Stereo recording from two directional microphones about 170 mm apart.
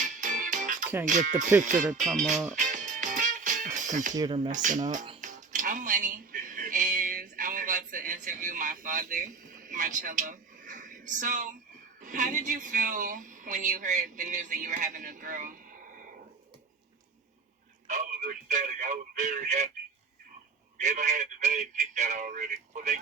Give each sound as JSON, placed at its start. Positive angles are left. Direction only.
{"t": 0.0, "sound": "music", "side_deg": -50}
{"t": 1.0, "sound": "speech", "side_deg": -45}
{"t": 2.3, "sound": "speech", "side_deg": -5}
{"t": 2.6, "sound": "music", "side_deg": -45}
{"t": 4.1, "sound": "speech", "side_deg": -25}
{"t": 4.4, "sound": "speech", "side_deg": -50}
{"t": 5.2, "sound": "music", "side_deg": -45}
{"t": 11.9, "sound": "speech", "side_deg": -50}
{"t": 17.8, "sound": "a sound", "side_deg": -50}
{"t": 20.7, "sound": "speech", "side_deg": -45}